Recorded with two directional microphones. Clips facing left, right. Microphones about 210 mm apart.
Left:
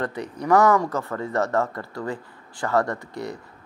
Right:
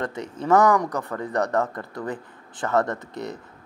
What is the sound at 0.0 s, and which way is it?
Speech, 20° right (ahead or behind).